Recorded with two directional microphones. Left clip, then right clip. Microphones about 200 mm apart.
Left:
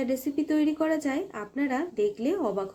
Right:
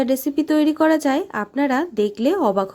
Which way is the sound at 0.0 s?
45° right (ahead or behind).